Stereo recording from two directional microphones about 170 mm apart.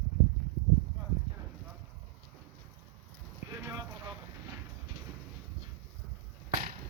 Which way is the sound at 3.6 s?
20° right (ahead or behind).